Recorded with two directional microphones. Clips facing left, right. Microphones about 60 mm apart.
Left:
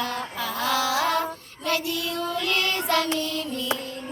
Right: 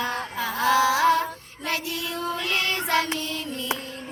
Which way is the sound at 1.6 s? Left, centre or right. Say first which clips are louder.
Left 3 dB; right.